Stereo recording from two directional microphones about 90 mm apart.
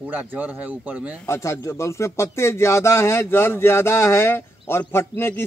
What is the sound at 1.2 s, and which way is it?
Speech, 30° left (ahead or behind).